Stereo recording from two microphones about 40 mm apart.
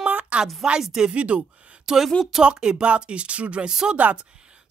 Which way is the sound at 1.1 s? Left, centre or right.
Right.